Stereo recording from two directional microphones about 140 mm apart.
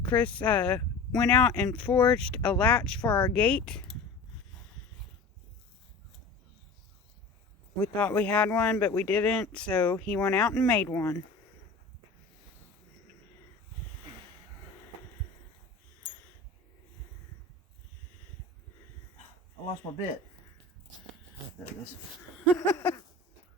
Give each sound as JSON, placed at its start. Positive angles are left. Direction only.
{"t": 0.1, "sound": "speech", "side_deg": 35}
{"t": 0.4, "sound": "speech", "side_deg": 10}
{"t": 7.8, "sound": "speech", "side_deg": 10}
{"t": 10.8, "sound": "a sound", "side_deg": 20}
{"t": 19.9, "sound": "speech", "side_deg": 45}
{"t": 22.5, "sound": "a sound", "side_deg": 25}